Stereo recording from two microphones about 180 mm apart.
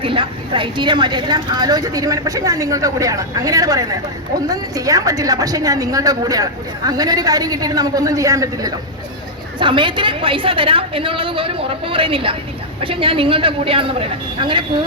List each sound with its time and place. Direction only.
0.0 s a woman's voice: 30° right (ahead or behind)